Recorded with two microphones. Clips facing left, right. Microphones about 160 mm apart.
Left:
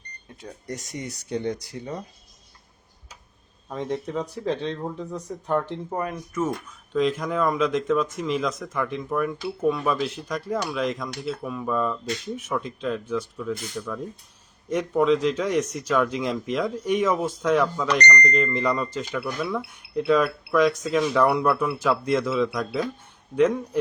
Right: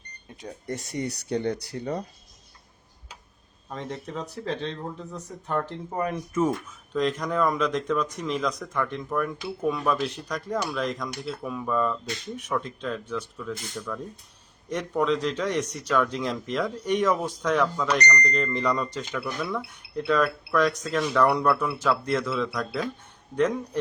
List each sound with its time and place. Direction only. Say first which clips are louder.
1.5 s speech: right 3 dB; 65° right (ahead or behind)
3.8 s speech: left 7 dB; 5° left (ahead or behind)
17.9 s speech: left 5 dB; 10° right (ahead or behind)
18.3 s speech: left 2 dB; 5° left (ahead or behind)